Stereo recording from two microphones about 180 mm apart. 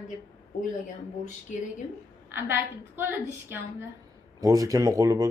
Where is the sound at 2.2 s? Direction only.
15° right (ahead or behind).